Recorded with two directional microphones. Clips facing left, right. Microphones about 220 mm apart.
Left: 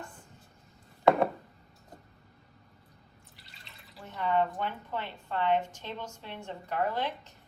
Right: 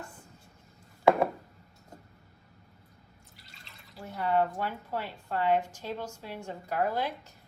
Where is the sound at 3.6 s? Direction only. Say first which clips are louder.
Right 3 dB; centre (ahead or behind).